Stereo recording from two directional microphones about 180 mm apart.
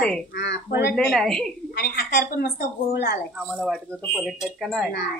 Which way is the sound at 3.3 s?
Centre (ahead or behind).